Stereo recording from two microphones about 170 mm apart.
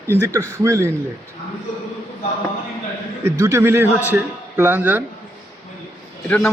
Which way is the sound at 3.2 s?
15° right (ahead or behind).